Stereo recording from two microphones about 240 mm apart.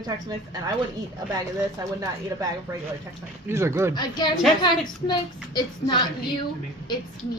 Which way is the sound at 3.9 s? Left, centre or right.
Centre.